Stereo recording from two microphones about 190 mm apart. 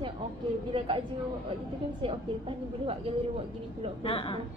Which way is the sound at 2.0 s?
30° right (ahead or behind).